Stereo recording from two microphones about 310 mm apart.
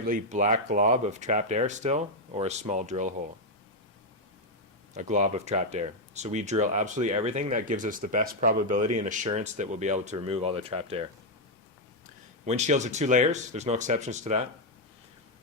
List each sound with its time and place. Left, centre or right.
0.1 s speech: right
4.9 s speech: right
12.5 s speech: right